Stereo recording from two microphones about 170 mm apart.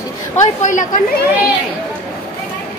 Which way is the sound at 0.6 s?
50° left (ahead or behind).